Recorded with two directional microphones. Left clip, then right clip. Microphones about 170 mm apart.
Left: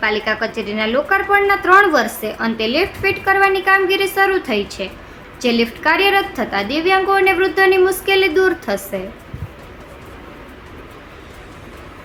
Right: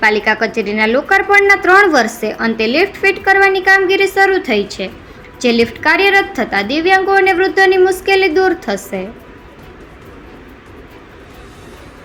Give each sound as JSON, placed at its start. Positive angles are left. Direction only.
{"t": 0.0, "sound": "a woman's voice", "side_deg": -15}